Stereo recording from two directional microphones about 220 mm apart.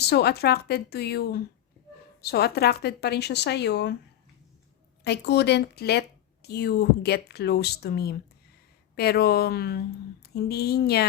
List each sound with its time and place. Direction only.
0.0 s speech: 45° left (ahead or behind)
5.0 s speech: 50° left (ahead or behind)